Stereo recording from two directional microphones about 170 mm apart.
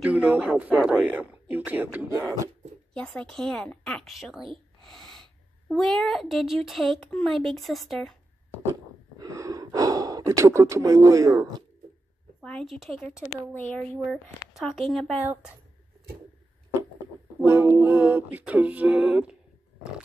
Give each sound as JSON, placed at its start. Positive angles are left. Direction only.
{"t": 0.0, "sound": "a sound", "side_deg": -10}
{"t": 2.9, "sound": "a woman's voice", "side_deg": 5}
{"t": 9.2, "sound": "gasp", "side_deg": -20}
{"t": 12.4, "sound": "a woman's voice", "side_deg": 5}
{"t": 13.6, "sound": "a woman's voice", "side_deg": 10}
{"t": 17.4, "sound": "a sound", "side_deg": -15}